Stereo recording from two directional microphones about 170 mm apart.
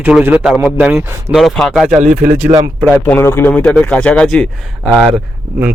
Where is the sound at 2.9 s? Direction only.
10° left (ahead or behind).